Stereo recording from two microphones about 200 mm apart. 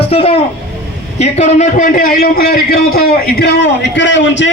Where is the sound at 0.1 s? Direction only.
30° left (ahead or behind).